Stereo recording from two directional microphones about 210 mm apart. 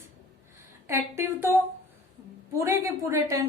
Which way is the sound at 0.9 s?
10° right (ahead or behind).